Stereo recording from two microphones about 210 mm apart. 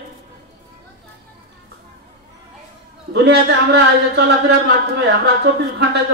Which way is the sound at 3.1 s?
55° right (ahead or behind).